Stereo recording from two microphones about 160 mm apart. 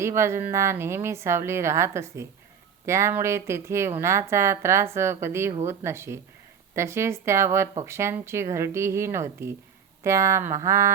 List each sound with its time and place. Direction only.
0.0 s speech: 15° right (ahead or behind)